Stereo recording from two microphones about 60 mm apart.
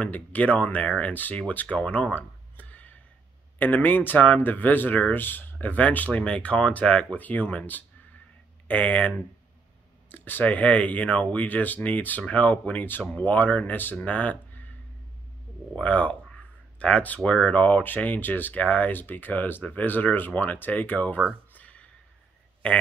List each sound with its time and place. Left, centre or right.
0.0 s speech: left
1.8 s a sound: left
3.5 s speech: left
10.1 s speech: left
15.7 s speech: left
21.5 s a sound: left